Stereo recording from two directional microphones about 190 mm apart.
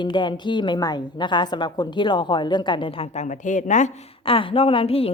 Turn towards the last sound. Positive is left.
turn(degrees=30)  # may be behind; listen again after turning